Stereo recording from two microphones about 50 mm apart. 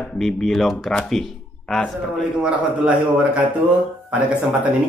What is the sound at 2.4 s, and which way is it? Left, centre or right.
Speech, right.